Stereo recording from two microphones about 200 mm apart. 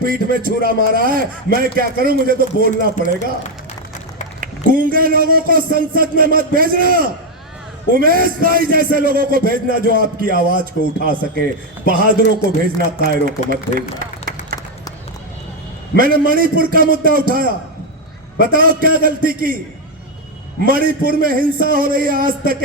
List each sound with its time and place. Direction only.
0.0 s a man's voice: 45° right (ahead or behind)
4.4 s a man's voice: 45° right (ahead or behind)
13.7 s a sound: 45° right (ahead or behind)
16.0 s a man's voice: 45° right (ahead or behind)
20.7 s a man's voice: 45° right (ahead or behind)